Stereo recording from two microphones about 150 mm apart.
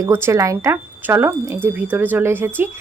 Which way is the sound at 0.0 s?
15° right (ahead or behind).